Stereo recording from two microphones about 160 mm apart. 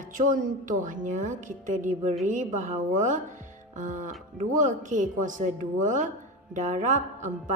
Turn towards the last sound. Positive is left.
turn(degrees=-50)  # may be behind; listen again after turning